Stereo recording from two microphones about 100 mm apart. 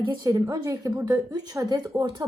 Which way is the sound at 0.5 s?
40° right (ahead or behind).